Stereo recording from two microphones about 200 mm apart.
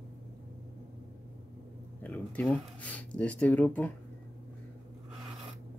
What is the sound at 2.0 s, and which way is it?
Speech, 10° left (ahead or behind).